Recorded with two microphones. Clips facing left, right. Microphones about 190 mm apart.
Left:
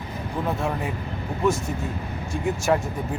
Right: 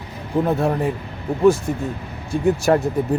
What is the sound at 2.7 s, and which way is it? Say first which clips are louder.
Speech: right 4 dB; 45° right (ahead or behind).